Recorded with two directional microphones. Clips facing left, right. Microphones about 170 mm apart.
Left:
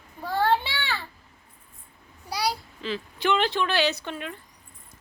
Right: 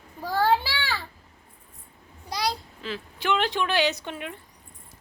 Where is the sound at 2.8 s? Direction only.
5° right (ahead or behind).